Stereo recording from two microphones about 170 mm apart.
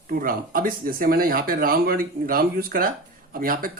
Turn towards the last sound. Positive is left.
turn(degrees=-60)  # may be behind; listen again after turning